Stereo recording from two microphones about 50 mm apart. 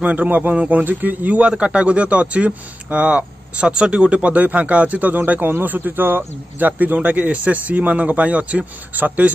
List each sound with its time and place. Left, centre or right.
0.0 s a man's voice: right